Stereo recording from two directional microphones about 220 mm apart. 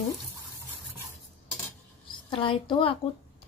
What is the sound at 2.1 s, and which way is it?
Speech, 20° left (ahead or behind).